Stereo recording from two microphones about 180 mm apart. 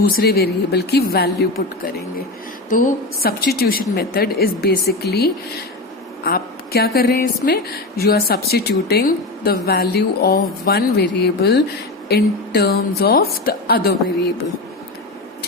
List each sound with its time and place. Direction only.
0.1 s a woman's voice: 60° left (ahead or behind)
2.6 s a woman's voice: 45° left (ahead or behind); by 11.6 s 75° left (ahead or behind)
12.0 s a woman's voice: 60° left (ahead or behind)